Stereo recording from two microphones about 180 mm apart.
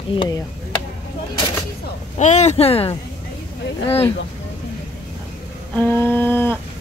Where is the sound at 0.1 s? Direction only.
25° left (ahead or behind).